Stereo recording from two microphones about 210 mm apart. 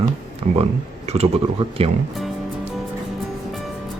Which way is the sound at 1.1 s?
30° right (ahead or behind).